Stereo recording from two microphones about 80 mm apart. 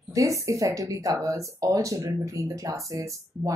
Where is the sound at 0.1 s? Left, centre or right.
Right.